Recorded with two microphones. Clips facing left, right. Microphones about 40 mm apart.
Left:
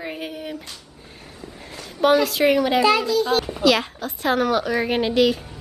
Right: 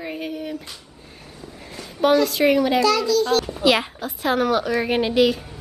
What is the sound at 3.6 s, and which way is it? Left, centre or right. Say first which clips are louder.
A woman's voice: even; centre.